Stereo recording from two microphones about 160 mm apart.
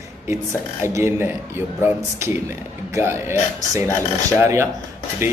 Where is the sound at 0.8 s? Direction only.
15° right (ahead or behind).